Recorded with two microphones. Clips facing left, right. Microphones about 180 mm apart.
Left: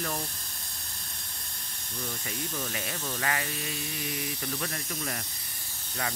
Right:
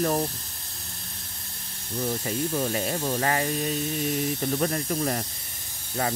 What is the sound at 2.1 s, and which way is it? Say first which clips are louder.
Speech: right 10 dB; 35° right (ahead or behind).